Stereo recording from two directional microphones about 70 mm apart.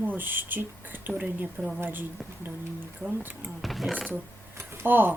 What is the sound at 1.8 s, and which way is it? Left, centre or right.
Speech, right.